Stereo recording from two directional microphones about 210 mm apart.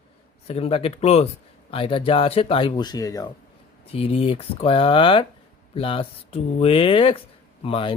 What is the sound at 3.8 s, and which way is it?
Speech, 30° left (ahead or behind).